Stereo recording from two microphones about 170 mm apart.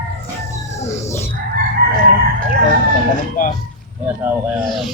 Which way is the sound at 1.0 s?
15° left (ahead or behind).